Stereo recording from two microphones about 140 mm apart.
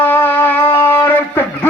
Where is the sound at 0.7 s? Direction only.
15° left (ahead or behind).